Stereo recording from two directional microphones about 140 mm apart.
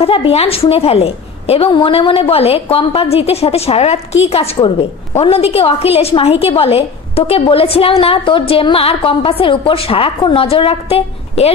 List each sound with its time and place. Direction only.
0.0 s a woman's voice: 40° left (ahead or behind)